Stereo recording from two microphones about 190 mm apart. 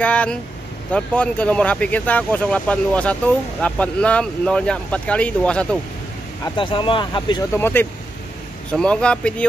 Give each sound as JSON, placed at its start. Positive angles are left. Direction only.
{"t": 0.0, "sound": "speech", "side_deg": 5}
{"t": 6.4, "sound": "speech", "side_deg": 25}
{"t": 7.5, "sound": "speech", "side_deg": 10}